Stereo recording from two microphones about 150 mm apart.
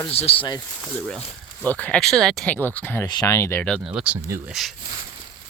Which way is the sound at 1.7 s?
10° left (ahead or behind).